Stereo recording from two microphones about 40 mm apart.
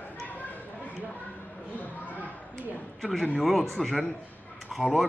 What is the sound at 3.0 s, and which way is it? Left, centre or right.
A man's voice, centre.